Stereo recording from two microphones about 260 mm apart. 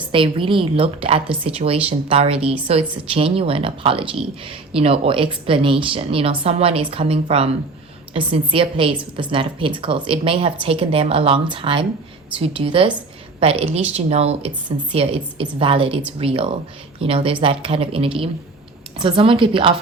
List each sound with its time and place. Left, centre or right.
0.1 s speech: centre